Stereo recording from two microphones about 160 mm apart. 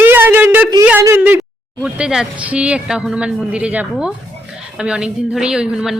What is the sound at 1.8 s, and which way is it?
A woman's voice, 5° right (ahead or behind).